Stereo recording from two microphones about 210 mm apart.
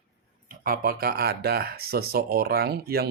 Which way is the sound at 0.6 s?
45° right (ahead or behind).